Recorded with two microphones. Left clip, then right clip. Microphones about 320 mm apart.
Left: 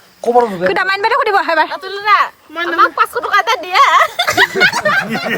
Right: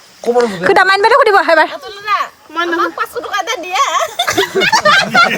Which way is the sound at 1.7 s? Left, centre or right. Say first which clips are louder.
Left 4 dB; left.